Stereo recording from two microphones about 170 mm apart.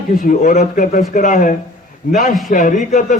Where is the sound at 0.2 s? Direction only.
55° left (ahead or behind).